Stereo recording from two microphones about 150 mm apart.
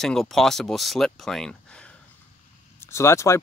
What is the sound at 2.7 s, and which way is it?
Speech, 20° left (ahead or behind).